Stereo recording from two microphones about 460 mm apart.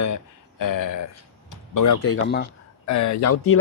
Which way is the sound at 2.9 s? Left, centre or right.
Left.